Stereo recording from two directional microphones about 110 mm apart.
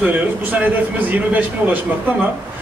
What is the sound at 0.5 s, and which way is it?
A man's voice, 15° right (ahead or behind).